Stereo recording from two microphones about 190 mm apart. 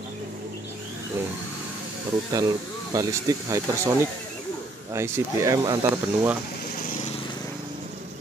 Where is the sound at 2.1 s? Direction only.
20° right (ahead or behind).